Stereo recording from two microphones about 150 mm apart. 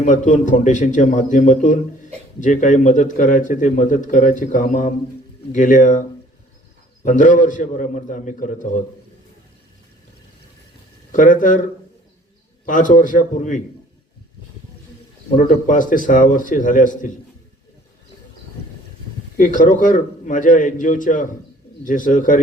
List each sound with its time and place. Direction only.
0.0 s a man's voice: 60° left (ahead or behind)
7.0 s a man's voice: 60° left (ahead or behind)
11.1 s a man's voice: 60° left (ahead or behind)
12.6 s a man's voice: 60° left (ahead or behind)
15.4 s a man's voice: 60° left (ahead or behind)
19.4 s a man's voice: 60° left (ahead or behind)